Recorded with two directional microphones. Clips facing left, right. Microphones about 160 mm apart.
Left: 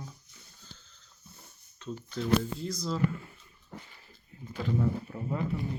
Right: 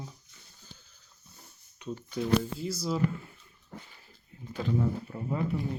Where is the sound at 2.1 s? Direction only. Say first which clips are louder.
Even; 10° right (ahead or behind).